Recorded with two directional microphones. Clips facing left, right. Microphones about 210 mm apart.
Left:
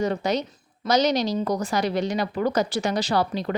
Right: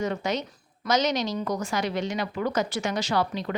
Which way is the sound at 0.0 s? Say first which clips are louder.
Left 4 dB; 35° left (ahead or behind).